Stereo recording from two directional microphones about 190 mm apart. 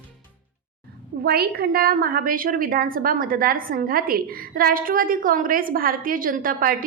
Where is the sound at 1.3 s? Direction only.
55° right (ahead or behind).